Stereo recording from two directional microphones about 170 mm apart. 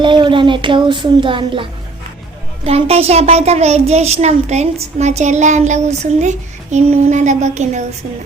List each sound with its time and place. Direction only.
0.0 s speech: 30° right (ahead or behind)
2.6 s a child's voice: 35° right (ahead or behind)